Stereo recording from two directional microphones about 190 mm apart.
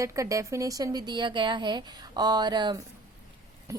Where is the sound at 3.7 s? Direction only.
15° right (ahead or behind).